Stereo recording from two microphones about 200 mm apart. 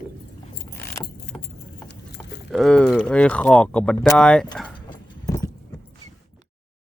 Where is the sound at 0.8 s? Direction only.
10° left (ahead or behind).